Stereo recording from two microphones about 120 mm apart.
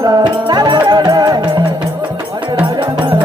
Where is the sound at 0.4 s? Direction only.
40° right (ahead or behind).